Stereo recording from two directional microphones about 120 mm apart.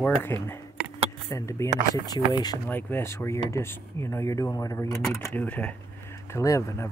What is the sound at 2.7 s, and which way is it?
Speech, 15° left (ahead or behind).